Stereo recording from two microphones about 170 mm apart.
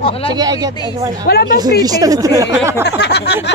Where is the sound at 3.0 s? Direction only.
75° left (ahead or behind).